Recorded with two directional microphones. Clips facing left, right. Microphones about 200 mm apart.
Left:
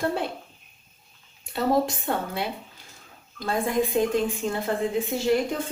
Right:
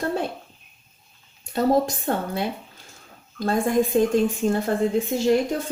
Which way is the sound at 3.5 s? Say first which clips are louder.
Right 4 dB; 45° right (ahead or behind).